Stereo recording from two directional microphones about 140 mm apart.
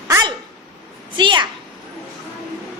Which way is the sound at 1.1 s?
35° right (ahead or behind).